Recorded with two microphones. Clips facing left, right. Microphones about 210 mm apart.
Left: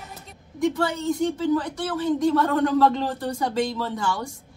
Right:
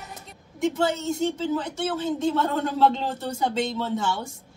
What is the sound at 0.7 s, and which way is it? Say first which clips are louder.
A woman's voice: left 1 dB; 25° right (ahead or behind).